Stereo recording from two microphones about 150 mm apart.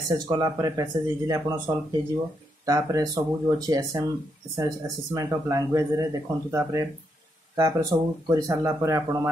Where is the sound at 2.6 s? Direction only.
25° right (ahead or behind).